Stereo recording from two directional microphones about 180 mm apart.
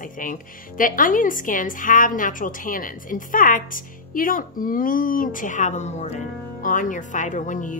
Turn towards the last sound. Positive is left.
turn(degrees=45)  # may be behind; listen again after turning